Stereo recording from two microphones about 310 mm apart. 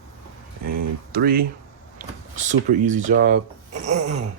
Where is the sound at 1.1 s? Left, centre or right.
Right.